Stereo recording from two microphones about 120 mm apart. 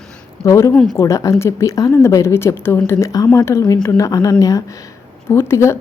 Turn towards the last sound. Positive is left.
turn(degrees=20)  # may be behind; listen again after turning